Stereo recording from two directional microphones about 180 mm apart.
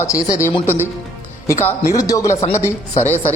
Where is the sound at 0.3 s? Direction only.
15° left (ahead or behind).